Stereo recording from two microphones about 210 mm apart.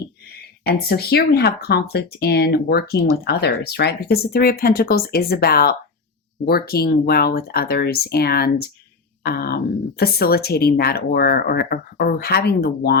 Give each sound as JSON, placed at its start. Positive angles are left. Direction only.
{"t": 0.7, "sound": "speech", "side_deg": 45}